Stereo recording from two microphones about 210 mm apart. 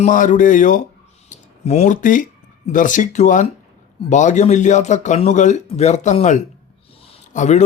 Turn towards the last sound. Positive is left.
turn(degrees=35)  # may be behind; listen again after turning